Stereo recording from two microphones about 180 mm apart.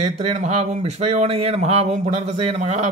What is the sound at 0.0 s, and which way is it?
Speech, 40° right (ahead or behind).